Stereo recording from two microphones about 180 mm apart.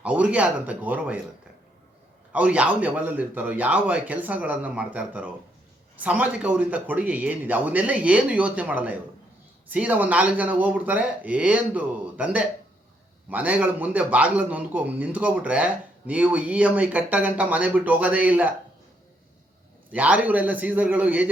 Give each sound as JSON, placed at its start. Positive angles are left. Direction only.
{"t": 0.0, "sound": "a man's voice", "side_deg": -10}
{"t": 2.3, "sound": "a man's voice", "side_deg": -10}
{"t": 19.9, "sound": "a man's voice", "side_deg": -10}